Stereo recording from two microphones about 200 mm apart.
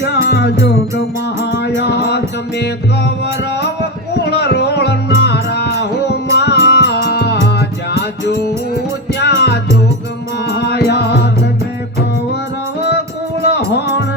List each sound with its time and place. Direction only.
0.0 s music: 55° left (ahead or behind)
4.2 s music: 55° left (ahead or behind)
9.2 s music: 55° left (ahead or behind)